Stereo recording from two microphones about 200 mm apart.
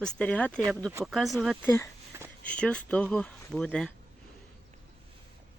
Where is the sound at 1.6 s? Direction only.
10° left (ahead or behind).